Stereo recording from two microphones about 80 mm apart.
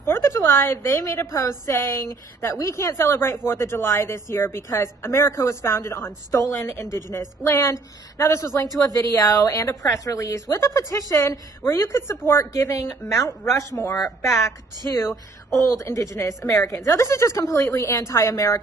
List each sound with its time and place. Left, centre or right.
0.1 s speech: left
8.8 s a woman's voice: left
11.6 s speech: left
13.3 s speech: centre
13.6 s speech: left
15.0 s speech: centre
15.7 s speech: left